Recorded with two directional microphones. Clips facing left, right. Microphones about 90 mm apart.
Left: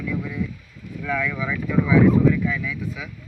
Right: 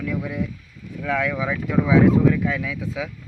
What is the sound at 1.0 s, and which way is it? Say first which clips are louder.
Speech: right 2 dB; 70° right (ahead or behind).